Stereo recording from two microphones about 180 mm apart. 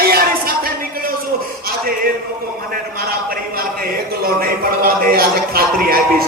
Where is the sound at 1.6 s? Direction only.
55° right (ahead or behind).